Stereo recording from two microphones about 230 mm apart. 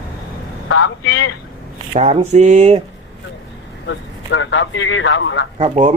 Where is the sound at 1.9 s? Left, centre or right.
Right.